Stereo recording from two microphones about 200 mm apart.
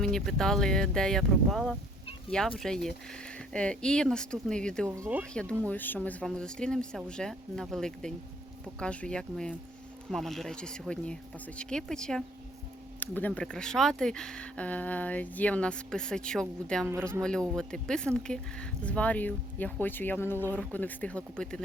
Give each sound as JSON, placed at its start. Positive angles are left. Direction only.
{"t": 0.0, "sound": "speech", "side_deg": 5}
{"t": 4.9, "sound": "speech", "side_deg": -10}
{"t": 5.3, "sound": "speech", "side_deg": 5}